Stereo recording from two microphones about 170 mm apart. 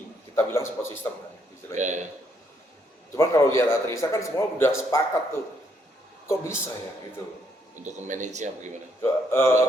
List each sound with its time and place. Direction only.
0.3 s a man's voice: 15° left (ahead or behind)
1.7 s speech: 45° right (ahead or behind)
3.2 s a man's voice: 15° left (ahead or behind)
6.2 s a man's voice: 15° left (ahead or behind)
7.9 s speech: 45° right (ahead or behind)
9.0 s a man's voice: 15° left (ahead or behind)